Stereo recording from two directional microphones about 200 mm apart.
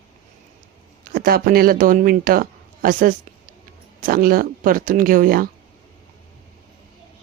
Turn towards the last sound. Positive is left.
turn(degrees=-45)  # may be behind; listen again after turning